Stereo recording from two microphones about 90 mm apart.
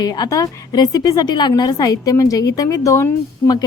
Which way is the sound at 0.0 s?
45° left (ahead or behind).